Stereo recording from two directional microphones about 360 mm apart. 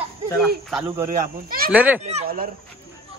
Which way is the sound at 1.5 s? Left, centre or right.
Right.